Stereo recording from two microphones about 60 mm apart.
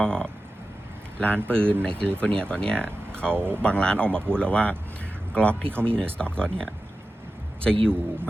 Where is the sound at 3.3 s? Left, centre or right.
Right.